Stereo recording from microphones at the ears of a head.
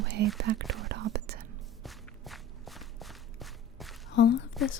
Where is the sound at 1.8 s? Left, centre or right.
Centre.